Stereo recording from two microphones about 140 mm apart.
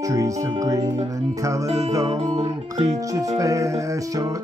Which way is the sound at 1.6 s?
50° right (ahead or behind).